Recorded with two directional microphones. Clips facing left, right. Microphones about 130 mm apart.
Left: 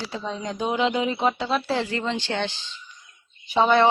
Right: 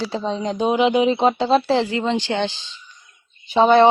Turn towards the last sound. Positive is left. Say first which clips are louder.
# right 5 dB
turn(degrees=-25)  # may be behind; listen again after turning